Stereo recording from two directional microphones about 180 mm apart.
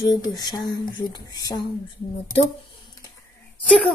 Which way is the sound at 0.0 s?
20° left (ahead or behind).